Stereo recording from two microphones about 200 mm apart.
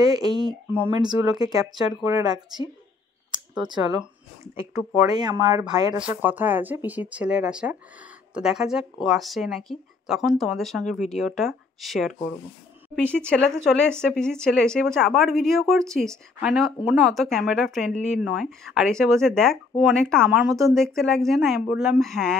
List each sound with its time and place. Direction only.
0.0 s speech: 20° right (ahead or behind)
0.7 s speech: 10° right (ahead or behind)
3.6 s speech: 20° right (ahead or behind)
5.0 s speech: 20° right (ahead or behind)
5.9 s speech: 5° right (ahead or behind)